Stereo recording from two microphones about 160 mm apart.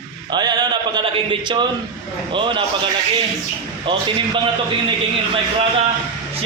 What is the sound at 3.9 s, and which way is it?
Speech, 30° right (ahead or behind).